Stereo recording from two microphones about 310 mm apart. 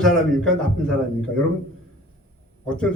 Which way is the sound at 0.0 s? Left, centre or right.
Centre.